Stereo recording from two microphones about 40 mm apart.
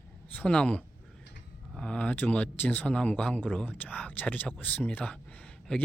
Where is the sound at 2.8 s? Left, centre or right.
Left.